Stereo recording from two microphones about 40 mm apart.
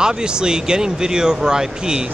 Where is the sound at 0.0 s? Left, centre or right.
Centre.